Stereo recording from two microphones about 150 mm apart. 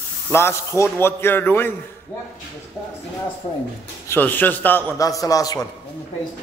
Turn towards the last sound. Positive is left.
turn(degrees=25)  # may be behind; listen again after turning